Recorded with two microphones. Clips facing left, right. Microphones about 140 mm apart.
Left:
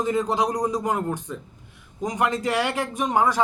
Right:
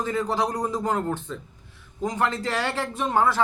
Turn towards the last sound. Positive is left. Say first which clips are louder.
# left 1 dB
turn(degrees=15)  # may be behind; listen again after turning